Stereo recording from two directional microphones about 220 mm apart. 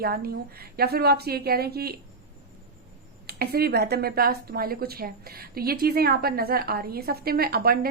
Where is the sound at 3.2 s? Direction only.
45° right (ahead or behind).